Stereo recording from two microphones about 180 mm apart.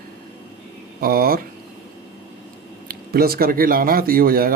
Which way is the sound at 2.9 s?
55° right (ahead or behind).